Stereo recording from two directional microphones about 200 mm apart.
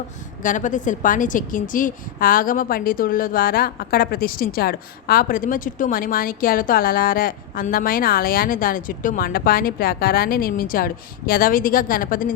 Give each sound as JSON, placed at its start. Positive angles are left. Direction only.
{"t": 0.4, "sound": "a woman's voice", "side_deg": 40}